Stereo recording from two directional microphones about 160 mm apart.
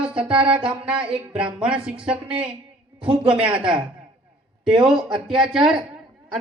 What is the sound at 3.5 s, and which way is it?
Speech, 30° right (ahead or behind).